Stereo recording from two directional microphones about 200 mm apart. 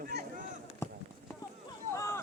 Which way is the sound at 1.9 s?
15° left (ahead or behind).